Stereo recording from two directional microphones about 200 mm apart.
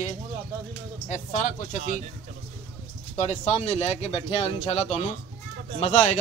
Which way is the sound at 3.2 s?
35° left (ahead or behind).